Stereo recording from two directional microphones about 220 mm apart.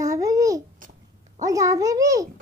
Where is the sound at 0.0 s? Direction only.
15° right (ahead or behind).